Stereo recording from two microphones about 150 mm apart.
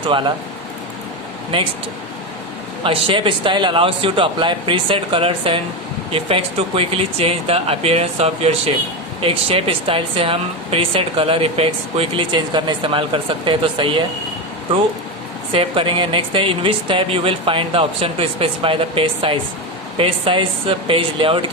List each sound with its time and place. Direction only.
2.8 s speech: 35° right (ahead or behind)
15.5 s speech: 35° right (ahead or behind)